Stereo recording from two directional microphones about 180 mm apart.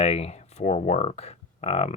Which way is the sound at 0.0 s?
35° left (ahead or behind).